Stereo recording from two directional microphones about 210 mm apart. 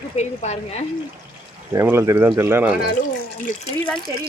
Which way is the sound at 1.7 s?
10° right (ahead or behind).